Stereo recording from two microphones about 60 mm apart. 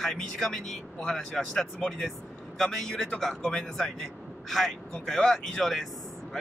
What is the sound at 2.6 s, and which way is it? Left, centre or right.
A man's voice, centre.